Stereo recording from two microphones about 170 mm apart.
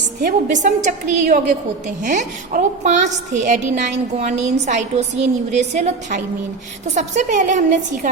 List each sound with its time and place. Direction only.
0.2 s a woman's voice: 60° right (ahead or behind)